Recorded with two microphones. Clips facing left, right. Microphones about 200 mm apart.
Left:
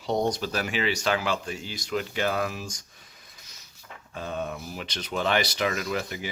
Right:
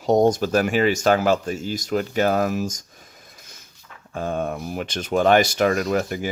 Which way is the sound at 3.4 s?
50° right (ahead or behind).